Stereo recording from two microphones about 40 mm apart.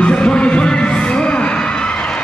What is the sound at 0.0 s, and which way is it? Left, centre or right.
Heart sounds, left.